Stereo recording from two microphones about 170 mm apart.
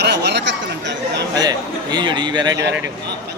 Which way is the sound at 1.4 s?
25° right (ahead or behind).